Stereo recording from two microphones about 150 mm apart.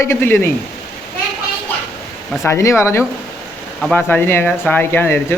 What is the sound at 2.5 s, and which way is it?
Speech, 20° left (ahead or behind).